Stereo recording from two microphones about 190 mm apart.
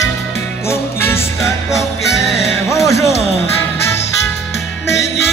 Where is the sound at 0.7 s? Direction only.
15° left (ahead or behind).